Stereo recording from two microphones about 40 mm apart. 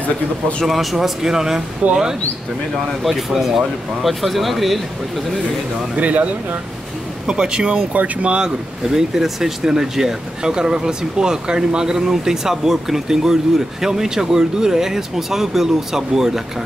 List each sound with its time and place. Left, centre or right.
0.7 s speech: centre
1.8 s speech: right
3.0 s speech: centre
5.9 s speech: right
7.2 s speech: right
7.9 s speech: right
8.8 s speech: centre